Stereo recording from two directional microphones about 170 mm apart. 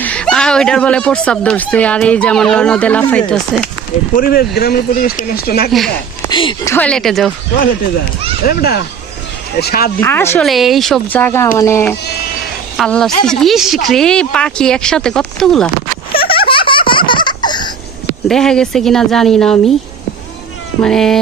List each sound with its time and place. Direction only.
0.0 s speech: 5° left (ahead or behind)
4.1 s speech: 60° left (ahead or behind)
6.2 s speech: 25° left (ahead or behind)
6.7 s speech: 5° left (ahead or behind)
8.4 s speech: 65° left (ahead or behind)
10.0 s speech: 15° left (ahead or behind)
10.4 s speech: centre (ahead or behind)
12.7 s speech: 5° left (ahead or behind)
16.5 s baby laughter: 30° left (ahead or behind)
18.3 s speech: 5° left (ahead or behind)
20.8 s speech: 5° left (ahead or behind)